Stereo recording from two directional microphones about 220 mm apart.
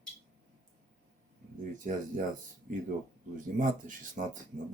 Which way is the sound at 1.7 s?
35° right (ahead or behind).